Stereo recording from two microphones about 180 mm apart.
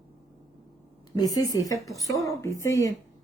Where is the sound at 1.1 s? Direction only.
20° left (ahead or behind).